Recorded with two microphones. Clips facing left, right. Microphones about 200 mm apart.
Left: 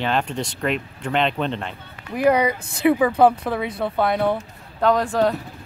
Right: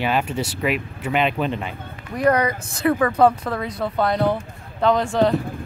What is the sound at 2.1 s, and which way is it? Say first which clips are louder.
Speech: left 1 dB; 10° left (ahead or behind).